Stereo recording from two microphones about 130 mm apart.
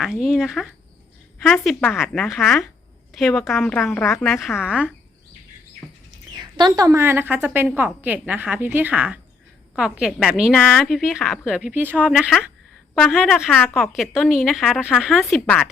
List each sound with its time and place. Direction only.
0.0 s a woman's voice: 5° right (ahead or behind)
6.3 s a woman's voice: 30° right (ahead or behind); by 12.1 s 15° right (ahead or behind)
13.1 s a woman's voice: centre (ahead or behind)